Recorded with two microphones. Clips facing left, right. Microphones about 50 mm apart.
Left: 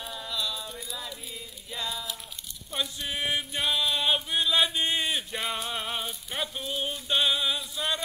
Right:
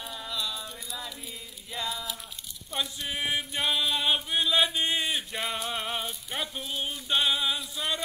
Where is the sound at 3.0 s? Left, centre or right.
Centre.